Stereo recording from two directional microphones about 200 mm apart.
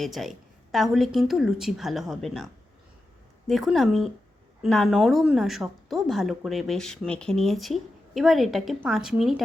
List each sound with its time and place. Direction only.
0.0 s a woman's voice: centre (ahead or behind)